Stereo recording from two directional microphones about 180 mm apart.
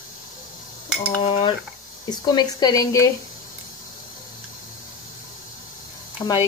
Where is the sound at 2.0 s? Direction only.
25° left (ahead or behind).